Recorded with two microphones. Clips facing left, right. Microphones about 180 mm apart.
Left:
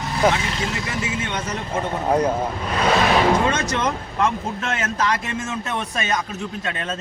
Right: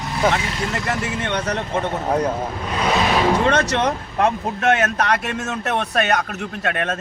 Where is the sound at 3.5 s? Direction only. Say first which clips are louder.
Right 4 dB; 70° right (ahead or behind).